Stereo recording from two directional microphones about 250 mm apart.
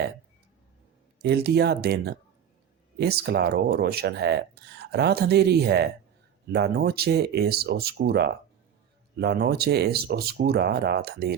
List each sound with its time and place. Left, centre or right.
1.2 s speech: right